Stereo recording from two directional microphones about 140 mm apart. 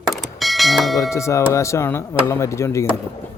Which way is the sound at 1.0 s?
20° left (ahead or behind).